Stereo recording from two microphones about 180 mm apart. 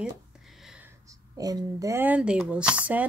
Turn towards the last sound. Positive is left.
turn(degrees=-10)  # may be behind; listen again after turning